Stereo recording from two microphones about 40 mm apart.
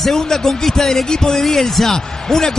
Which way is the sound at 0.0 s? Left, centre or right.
Centre.